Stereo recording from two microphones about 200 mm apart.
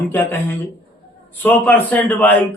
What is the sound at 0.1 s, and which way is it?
A man's voice, 10° left (ahead or behind).